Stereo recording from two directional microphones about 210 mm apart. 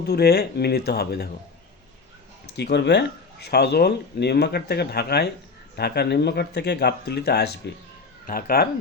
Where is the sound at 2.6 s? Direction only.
55° left (ahead or behind).